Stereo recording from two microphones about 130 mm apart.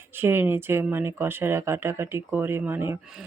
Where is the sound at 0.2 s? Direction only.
15° right (ahead or behind).